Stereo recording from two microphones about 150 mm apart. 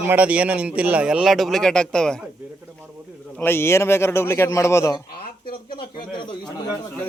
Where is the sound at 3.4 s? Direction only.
15° left (ahead or behind).